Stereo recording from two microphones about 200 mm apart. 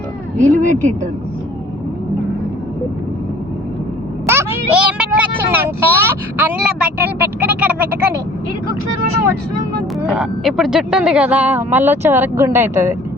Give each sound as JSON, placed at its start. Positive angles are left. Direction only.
{"t": 0.3, "sound": "speech", "side_deg": -40}
{"t": 4.3, "sound": "speech", "side_deg": -10}
{"t": 10.1, "sound": "speech", "side_deg": -5}